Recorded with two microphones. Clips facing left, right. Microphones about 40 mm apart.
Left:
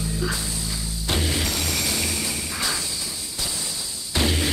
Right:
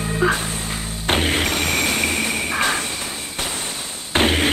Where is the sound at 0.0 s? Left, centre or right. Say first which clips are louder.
Right 8 dB; right.